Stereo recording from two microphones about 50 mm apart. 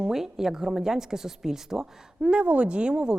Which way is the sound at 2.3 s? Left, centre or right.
Right.